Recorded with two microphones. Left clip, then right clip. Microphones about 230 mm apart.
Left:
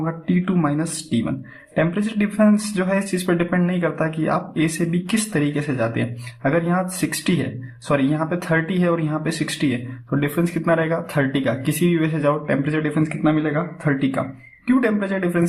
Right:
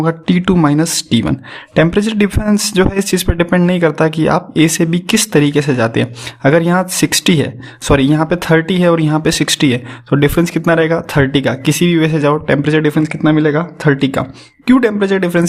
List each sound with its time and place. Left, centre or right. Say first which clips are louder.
0.0 s speech: right 9 dB; right